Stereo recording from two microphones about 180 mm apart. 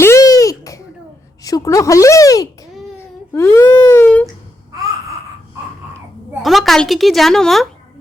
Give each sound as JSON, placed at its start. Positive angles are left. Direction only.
{"t": 0.0, "sound": "a sound", "side_deg": 15}
{"t": 1.5, "sound": "speech", "side_deg": 20}
{"t": 6.4, "sound": "a woman's voice", "side_deg": 0}